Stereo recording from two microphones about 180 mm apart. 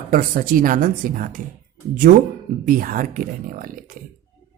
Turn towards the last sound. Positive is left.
turn(degrees=-50)  # may be behind; listen again after turning